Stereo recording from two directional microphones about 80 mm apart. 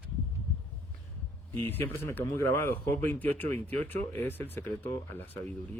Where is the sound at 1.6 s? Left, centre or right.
Left.